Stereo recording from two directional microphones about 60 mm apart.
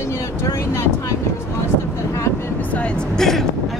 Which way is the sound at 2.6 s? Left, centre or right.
Left.